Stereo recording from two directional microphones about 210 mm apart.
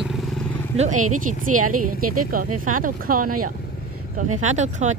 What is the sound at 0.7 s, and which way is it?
Speech, 35° right (ahead or behind).